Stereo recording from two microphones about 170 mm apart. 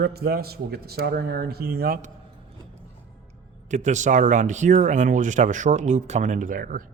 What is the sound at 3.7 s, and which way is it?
Speech, 45° right (ahead or behind).